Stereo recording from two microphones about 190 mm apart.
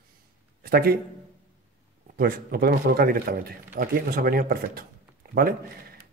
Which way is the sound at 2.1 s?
50° right (ahead or behind).